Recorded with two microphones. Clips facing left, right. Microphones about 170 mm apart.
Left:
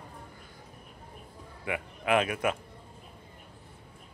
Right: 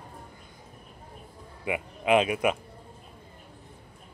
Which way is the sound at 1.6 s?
20° right (ahead or behind).